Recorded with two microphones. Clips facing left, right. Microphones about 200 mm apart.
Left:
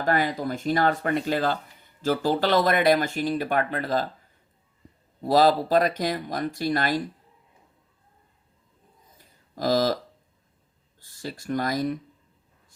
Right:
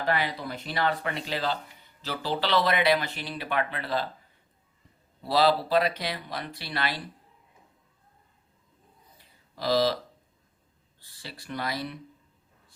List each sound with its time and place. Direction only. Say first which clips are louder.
0.0 s speech: left 4 dB; 45° left (ahead or behind)
5.2 s speech: left 4 dB; 45° left (ahead or behind)
9.1 s a sound: left 7 dB; 45° left (ahead or behind)
11.0 s speech: left 10 dB; 45° left (ahead or behind)